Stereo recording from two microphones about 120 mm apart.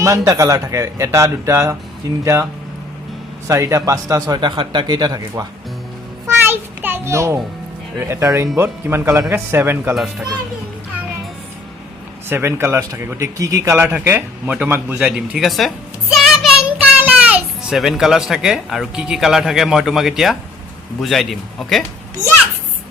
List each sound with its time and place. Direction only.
0.0 s a man's voice: 25° right (ahead or behind)
6.2 s a sound: 20° right (ahead or behind)
7.9 s speech: 20° right (ahead or behind)
9.9 s a man's voice: 5° right (ahead or behind)
12.3 s speech: 20° right (ahead or behind); by 15.7 s centre (ahead or behind)
16.1 s child singing: centre (ahead or behind)
17.0 s a man's voice: 10° right (ahead or behind)